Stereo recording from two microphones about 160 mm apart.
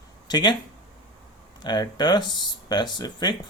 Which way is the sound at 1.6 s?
30° left (ahead or behind).